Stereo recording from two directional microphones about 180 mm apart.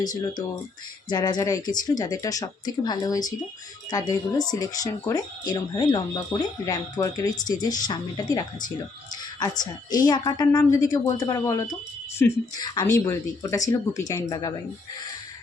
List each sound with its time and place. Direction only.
0.0 s speech: 20° left (ahead or behind)